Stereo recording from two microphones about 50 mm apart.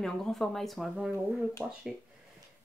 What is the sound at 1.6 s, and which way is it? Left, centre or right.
Speech, right.